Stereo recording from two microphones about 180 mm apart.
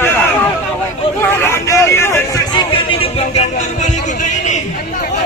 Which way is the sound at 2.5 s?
30° left (ahead or behind).